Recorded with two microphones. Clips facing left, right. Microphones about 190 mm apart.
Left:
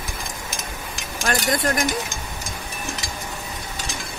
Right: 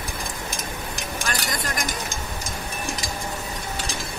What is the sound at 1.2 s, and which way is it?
Speech, 55° left (ahead or behind).